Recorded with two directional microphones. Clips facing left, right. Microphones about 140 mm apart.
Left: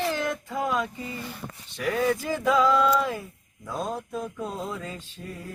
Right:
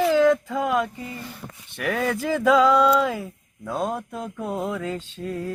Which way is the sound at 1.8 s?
70° right (ahead or behind).